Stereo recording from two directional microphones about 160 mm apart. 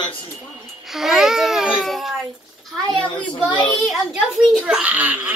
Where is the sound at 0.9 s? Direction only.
5° right (ahead or behind).